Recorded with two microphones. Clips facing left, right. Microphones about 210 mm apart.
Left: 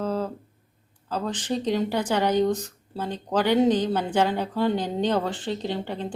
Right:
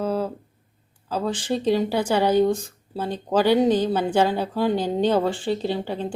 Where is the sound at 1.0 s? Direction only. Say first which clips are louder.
Right 3 dB; 10° right (ahead or behind).